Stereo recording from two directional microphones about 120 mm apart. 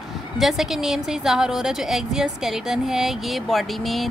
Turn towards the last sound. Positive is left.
turn(degrees=0)  # may be behind; listen again after turning